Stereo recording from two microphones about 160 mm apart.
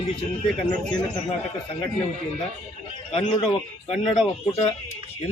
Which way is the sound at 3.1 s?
40° left (ahead or behind).